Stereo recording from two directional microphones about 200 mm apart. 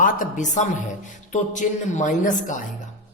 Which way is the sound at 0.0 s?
40° left (ahead or behind).